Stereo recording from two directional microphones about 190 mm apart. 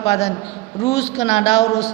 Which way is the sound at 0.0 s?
35° left (ahead or behind).